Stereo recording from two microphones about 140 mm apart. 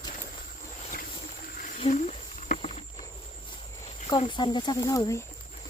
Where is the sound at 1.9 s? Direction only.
60° left (ahead or behind).